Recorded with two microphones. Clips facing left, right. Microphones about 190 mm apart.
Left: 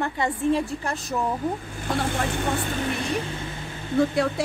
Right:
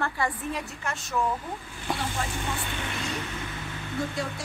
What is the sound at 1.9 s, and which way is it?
Speech, 60° left (ahead or behind).